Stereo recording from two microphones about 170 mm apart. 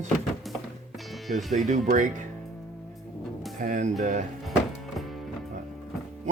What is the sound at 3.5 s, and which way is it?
Speech, 50° right (ahead or behind).